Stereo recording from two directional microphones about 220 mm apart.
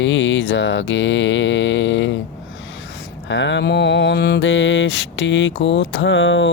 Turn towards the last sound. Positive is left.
turn(degrees=55)  # may be behind; listen again after turning